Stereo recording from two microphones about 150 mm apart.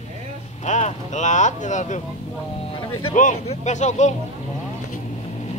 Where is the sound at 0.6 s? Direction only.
50° left (ahead or behind).